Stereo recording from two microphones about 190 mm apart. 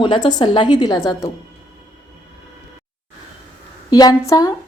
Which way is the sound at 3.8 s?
20° left (ahead or behind).